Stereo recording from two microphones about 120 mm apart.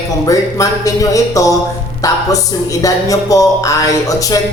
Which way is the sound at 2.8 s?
30° left (ahead or behind).